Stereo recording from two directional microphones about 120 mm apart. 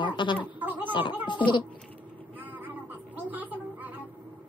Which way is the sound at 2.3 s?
15° right (ahead or behind).